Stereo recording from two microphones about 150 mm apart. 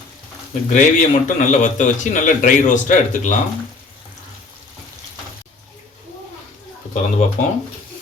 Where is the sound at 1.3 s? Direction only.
55° left (ahead or behind).